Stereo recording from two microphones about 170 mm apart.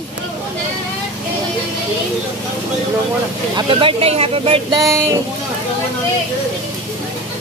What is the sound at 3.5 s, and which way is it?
Speech, 30° right (ahead or behind).